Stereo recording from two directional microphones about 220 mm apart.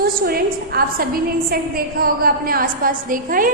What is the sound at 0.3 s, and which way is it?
A woman's voice, 45° right (ahead or behind).